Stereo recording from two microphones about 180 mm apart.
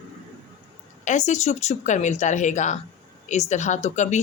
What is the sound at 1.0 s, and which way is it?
Speech, 40° left (ahead or behind).